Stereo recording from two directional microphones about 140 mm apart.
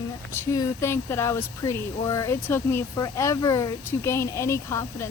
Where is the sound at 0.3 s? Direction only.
20° left (ahead or behind).